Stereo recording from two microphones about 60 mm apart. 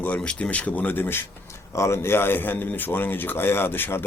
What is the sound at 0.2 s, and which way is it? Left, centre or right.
Speech, centre.